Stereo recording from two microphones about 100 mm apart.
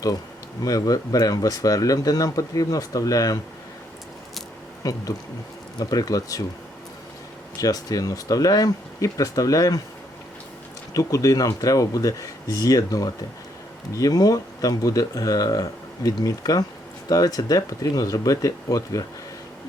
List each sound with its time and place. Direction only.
0.6 s speech: 35° left (ahead or behind)
4.8 s speech: 35° left (ahead or behind)
7.6 s speech: 40° left (ahead or behind)
10.9 s speech: 35° left (ahead or behind)